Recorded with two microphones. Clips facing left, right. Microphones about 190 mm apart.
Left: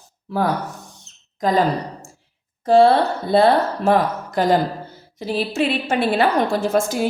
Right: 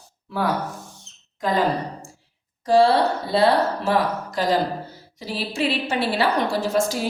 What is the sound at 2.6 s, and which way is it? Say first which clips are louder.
A woman's voice: left 3 dB; 55° left (ahead or behind).